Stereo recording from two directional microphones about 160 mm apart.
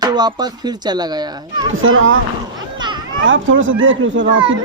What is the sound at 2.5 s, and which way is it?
Children playing, 30° right (ahead or behind).